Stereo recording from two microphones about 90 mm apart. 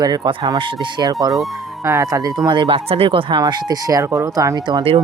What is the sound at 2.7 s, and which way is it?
Speech, 85° right.